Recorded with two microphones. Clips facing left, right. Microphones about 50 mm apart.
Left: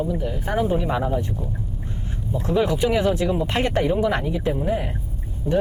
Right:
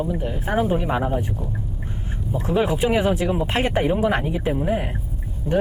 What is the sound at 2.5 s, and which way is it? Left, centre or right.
Speech, right.